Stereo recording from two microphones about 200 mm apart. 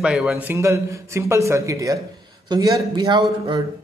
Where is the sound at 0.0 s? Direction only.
Centre (ahead or behind).